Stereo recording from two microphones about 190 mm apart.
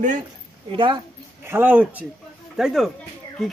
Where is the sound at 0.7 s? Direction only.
25° right (ahead or behind).